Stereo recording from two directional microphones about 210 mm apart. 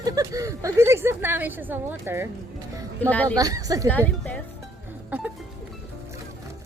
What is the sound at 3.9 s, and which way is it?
Speech, 5° left (ahead or behind).